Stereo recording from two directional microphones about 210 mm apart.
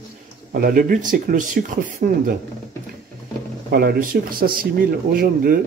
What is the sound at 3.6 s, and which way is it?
Speech, 45° right (ahead or behind).